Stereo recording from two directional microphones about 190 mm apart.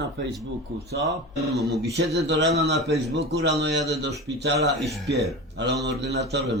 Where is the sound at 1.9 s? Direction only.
65° right (ahead or behind).